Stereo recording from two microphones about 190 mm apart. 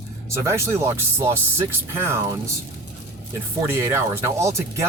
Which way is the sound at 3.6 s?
15° right (ahead or behind).